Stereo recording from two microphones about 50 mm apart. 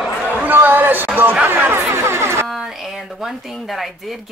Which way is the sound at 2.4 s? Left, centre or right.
Centre.